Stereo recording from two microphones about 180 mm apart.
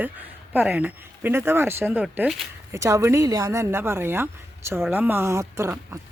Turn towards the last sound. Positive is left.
turn(degrees=-15)  # may be behind; listen again after turning